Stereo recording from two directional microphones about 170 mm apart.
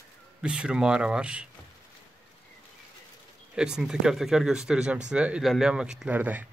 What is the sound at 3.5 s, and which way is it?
Speech, 5° right (ahead or behind).